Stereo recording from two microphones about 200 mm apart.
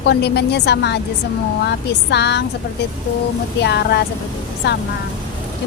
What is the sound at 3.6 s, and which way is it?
Speech, 55° left (ahead or behind).